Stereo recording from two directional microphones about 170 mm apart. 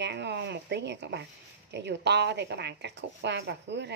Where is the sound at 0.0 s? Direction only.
90° right.